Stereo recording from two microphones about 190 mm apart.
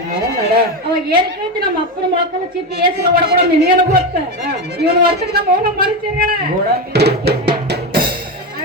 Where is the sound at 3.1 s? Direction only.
50° right (ahead or behind).